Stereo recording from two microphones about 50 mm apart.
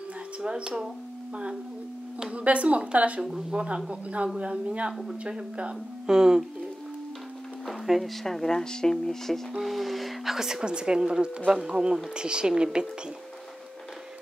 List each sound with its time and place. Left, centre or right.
0.4 s speech: centre
2.3 s a woman's voice: right
3.2 s a woman's voice: centre
7.6 s a sound: centre
8.2 s speech: centre